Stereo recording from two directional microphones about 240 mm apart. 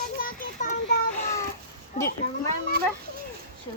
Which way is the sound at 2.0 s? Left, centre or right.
Left.